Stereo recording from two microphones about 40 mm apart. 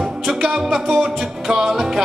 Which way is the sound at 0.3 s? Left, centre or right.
Centre.